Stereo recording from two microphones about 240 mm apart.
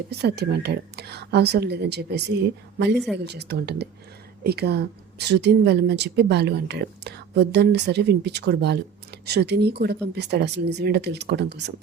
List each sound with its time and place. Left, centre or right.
0.1 s speech: right